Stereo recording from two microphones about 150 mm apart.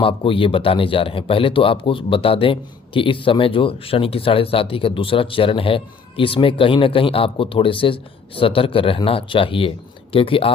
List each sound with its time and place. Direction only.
0.0 s speech: 35° left (ahead or behind)